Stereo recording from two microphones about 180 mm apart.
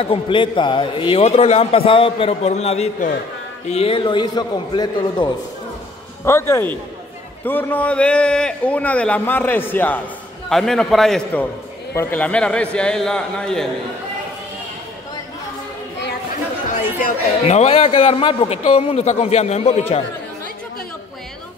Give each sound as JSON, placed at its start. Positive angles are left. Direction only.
{"t": 0.0, "sound": "a man's voice", "side_deg": 30}
{"t": 17.0, "sound": "a man's voice", "side_deg": 35}